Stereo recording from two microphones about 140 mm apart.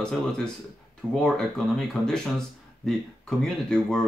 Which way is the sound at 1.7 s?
5° left (ahead or behind).